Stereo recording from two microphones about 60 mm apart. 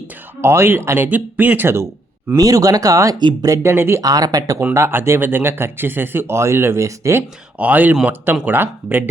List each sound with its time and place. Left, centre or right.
0.4 s speech: right
1.6 s speech: right
2.3 s speech: right
3.6 s speech: right
4.0 s speech: right
4.7 s speech: right
6.8 s speech: right
7.2 s speech: right